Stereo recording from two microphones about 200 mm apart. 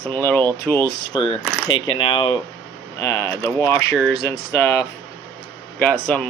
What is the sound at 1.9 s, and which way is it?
Speech, 25° left (ahead or behind).